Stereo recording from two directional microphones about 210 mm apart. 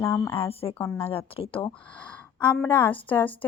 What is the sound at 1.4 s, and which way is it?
Speech, 25° left (ahead or behind).